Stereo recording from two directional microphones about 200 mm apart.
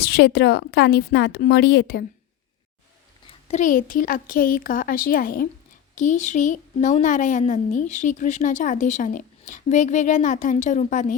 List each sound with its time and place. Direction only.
0.0 s a woman's voice: 55° left (ahead or behind)
3.5 s a woman's voice: 40° left (ahead or behind)